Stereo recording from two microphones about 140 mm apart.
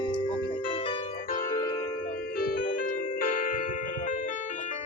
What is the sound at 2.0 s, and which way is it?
Music, 90° left.